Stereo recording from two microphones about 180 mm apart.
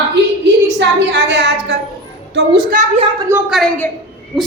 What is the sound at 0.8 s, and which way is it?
Speech, 80° right.